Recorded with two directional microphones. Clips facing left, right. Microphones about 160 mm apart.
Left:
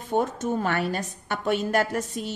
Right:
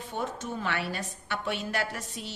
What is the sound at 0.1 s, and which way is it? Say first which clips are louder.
A woman's voice: left 10 dB; 45° left (ahead or behind).